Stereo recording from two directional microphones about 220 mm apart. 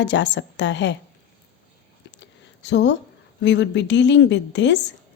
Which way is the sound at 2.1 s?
55° left (ahead or behind).